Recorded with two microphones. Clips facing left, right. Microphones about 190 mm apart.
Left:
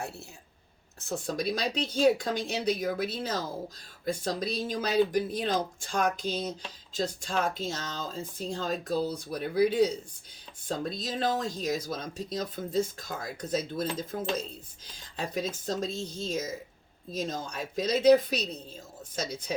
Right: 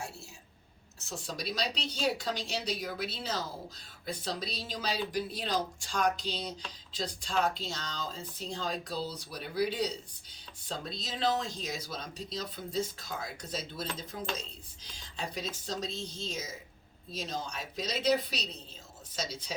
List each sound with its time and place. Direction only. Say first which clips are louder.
1.0 s speech: left 8 dB; 55° left (ahead or behind)